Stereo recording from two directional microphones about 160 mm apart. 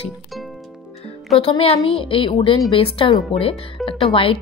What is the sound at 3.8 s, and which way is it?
Speech, centre (ahead or behind).